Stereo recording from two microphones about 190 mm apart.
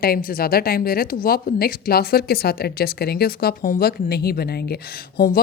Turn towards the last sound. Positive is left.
turn(degrees=50)  # may be behind; listen again after turning